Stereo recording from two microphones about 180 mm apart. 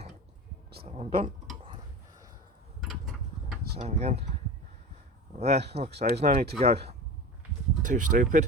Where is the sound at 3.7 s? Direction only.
35° right (ahead or behind).